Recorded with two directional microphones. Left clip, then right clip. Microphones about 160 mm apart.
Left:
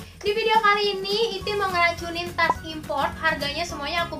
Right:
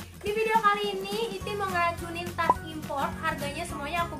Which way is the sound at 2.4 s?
25° left (ahead or behind).